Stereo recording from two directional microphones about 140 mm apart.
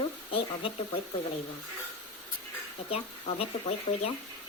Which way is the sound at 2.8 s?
45° left (ahead or behind).